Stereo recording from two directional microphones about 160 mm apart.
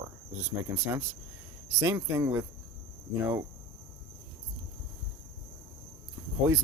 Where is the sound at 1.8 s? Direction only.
20° right (ahead or behind).